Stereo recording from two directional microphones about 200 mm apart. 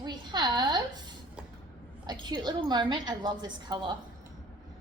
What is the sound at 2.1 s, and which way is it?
A woman's voice, 20° right (ahead or behind).